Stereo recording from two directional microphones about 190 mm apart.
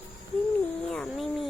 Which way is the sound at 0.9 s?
Centre (ahead or behind).